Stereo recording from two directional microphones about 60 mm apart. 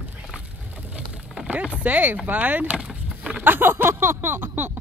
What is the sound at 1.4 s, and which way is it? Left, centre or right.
Speech, right.